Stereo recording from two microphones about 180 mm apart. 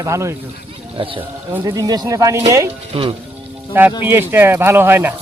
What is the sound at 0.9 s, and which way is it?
Speech, 30° right (ahead or behind).